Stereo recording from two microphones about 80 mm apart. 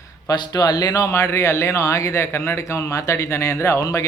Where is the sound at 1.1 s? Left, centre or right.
Left.